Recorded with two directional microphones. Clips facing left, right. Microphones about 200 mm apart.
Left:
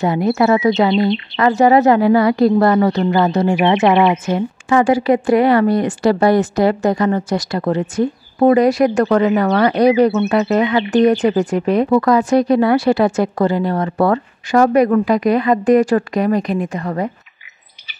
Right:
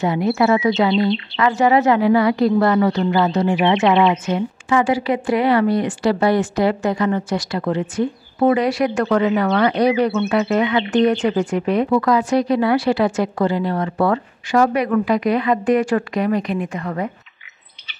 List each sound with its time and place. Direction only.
0.0 s speech: 40° left (ahead or behind)
0.9 s speech: 20° left (ahead or behind)
1.3 s speech: 40° left (ahead or behind)
3.6 s speech: 55° left (ahead or behind); by 17.1 s 35° left (ahead or behind)